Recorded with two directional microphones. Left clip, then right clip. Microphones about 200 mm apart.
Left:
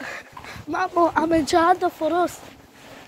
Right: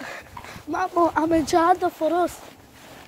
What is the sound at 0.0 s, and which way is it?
Speech, 10° right (ahead or behind).